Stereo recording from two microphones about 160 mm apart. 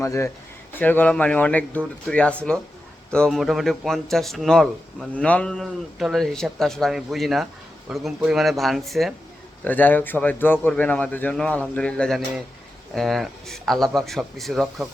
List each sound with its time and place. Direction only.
0.0 s speech: 20° left (ahead or behind); by 9.1 s centre (ahead or behind)
9.6 s speech: 10° left (ahead or behind)